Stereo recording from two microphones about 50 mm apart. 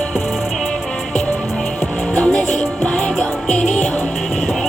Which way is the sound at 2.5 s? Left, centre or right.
Centre.